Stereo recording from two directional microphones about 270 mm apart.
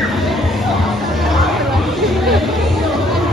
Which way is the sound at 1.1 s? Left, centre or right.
Centre.